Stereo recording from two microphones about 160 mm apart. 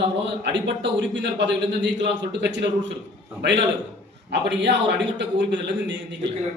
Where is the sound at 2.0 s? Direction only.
90° right.